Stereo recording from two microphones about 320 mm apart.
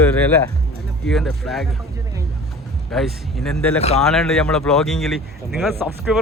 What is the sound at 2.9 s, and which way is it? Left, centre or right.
Speech, centre.